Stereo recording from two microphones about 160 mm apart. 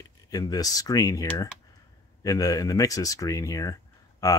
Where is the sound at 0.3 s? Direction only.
25° left (ahead or behind).